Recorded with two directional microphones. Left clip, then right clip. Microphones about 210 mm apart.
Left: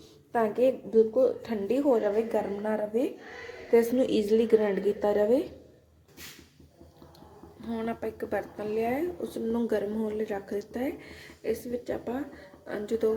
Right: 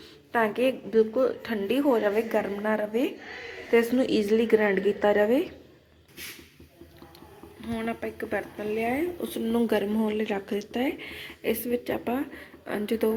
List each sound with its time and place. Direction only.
0.3 s a woman's voice: 5° left (ahead or behind)
7.7 s speech: centre (ahead or behind); by 13.1 s 15° right (ahead or behind)